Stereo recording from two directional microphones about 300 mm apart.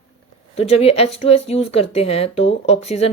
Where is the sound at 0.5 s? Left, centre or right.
Centre.